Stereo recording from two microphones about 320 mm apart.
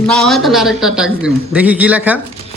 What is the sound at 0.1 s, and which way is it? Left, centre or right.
A man's voice, centre.